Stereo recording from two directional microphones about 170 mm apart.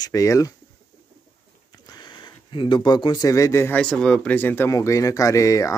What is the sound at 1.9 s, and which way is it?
Speech, 25° left (ahead or behind).